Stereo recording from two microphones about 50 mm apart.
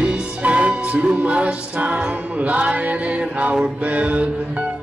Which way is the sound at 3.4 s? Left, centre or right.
Right.